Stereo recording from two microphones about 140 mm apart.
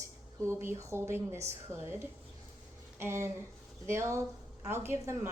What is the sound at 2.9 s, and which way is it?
A woman's voice, 20° right (ahead or behind).